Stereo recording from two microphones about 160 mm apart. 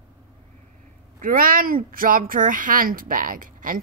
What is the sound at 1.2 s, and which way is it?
Speech, 60° right (ahead or behind).